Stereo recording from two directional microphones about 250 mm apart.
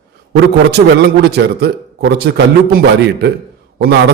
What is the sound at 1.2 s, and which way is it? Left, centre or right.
A man's voice, right.